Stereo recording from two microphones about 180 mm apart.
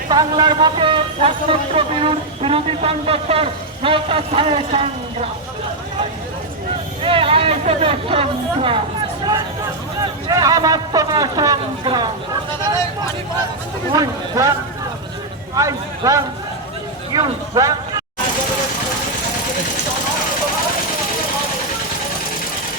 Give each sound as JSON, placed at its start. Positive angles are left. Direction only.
{"t": 0.1, "sound": "a man's voice", "side_deg": -25}
{"t": 7.0, "sound": "a man's voice", "side_deg": -30}
{"t": 10.0, "sound": "speech", "side_deg": -20}
{"t": 13.9, "sound": "speech", "side_deg": -20}
{"t": 15.5, "sound": "speech", "side_deg": -20}